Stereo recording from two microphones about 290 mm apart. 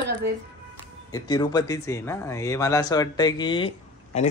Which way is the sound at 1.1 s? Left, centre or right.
Centre.